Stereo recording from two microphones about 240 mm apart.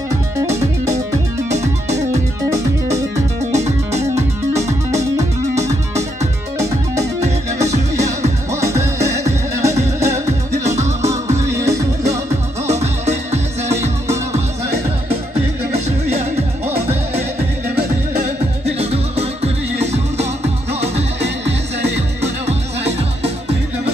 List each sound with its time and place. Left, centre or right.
3.5 s music: right
4.9 s music: centre
7.7 s music: right
8.5 s music: centre
11.3 s music: centre
12.6 s music: right
18.8 s music: right
22.2 s music: right